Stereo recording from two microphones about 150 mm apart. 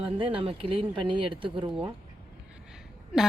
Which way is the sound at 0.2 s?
35° right (ahead or behind).